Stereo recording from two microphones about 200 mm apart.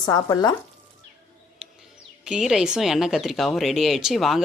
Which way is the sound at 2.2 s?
Centre (ahead or behind).